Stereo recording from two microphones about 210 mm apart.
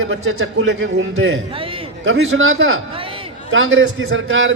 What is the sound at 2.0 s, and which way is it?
A man's voice, 70° right (ahead or behind).